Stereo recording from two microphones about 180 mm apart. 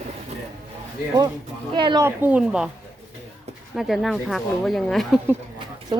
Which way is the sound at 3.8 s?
Centre (ahead or behind).